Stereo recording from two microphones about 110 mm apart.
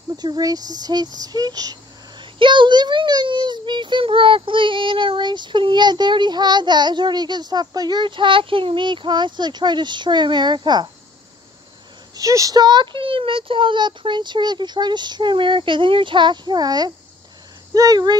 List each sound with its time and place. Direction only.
0.1 s speech: 40° right (ahead or behind)
2.3 s a child's voice: 50° right (ahead or behind)
12.2 s a child's voice: 30° right (ahead or behind)